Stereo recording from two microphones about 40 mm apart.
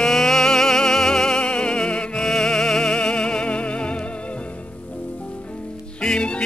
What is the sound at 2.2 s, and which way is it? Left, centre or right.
Music, centre.